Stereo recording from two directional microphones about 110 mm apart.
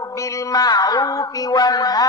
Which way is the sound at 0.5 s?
35° left (ahead or behind).